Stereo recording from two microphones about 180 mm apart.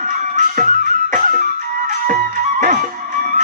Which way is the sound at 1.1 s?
45° right (ahead or behind).